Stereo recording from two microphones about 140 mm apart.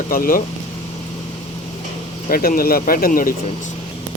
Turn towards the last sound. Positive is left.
turn(degrees=80)